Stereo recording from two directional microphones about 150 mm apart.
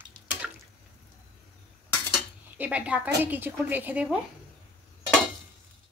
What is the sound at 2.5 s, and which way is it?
A woman's voice, 10° right (ahead or behind).